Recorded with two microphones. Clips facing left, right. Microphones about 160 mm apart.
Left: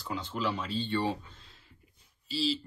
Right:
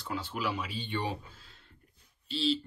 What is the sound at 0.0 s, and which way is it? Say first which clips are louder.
Speech: left 1 dB; 5° right (ahead or behind).